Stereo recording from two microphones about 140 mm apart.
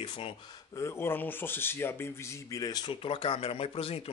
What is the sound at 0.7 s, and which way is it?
Speech, 20° left (ahead or behind).